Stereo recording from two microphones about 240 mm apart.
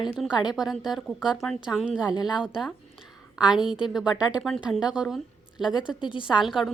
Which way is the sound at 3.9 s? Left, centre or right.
Centre.